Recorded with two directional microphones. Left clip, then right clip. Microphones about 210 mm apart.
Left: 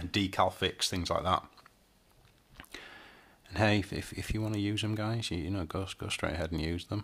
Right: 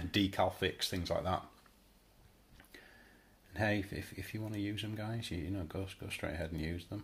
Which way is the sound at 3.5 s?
30° left (ahead or behind).